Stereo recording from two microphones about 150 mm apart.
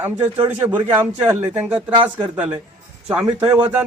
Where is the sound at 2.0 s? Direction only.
10° right (ahead or behind).